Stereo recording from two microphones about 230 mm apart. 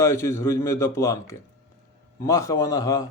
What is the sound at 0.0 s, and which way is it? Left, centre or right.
A man's voice, centre.